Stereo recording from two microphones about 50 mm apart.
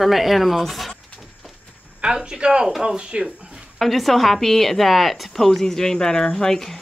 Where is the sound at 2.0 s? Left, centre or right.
Centre.